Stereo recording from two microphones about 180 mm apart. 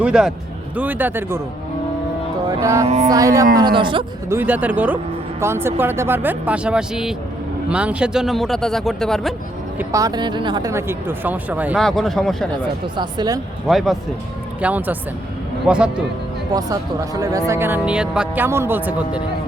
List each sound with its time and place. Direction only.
0.0 s speech: 5° right (ahead or behind)
2.6 s speech: 15° right (ahead or behind)
2.8 s speech: 40° right (ahead or behind)
3.1 s speech: 20° right (ahead or behind)
4.3 s speech: 10° right (ahead or behind)
9.7 s speech: 20° right (ahead or behind)
11.8 s speech: centre (ahead or behind)
12.8 s speech: 25° right (ahead or behind)
13.7 s speech: centre (ahead or behind)
16.6 s speech: 20° right (ahead or behind)